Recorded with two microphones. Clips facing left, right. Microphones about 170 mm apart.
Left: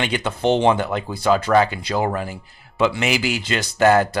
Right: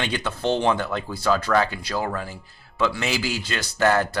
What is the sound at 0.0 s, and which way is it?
Speech, 20° left (ahead or behind).